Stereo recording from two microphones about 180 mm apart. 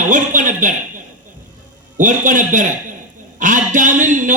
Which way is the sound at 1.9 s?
45° right (ahead or behind).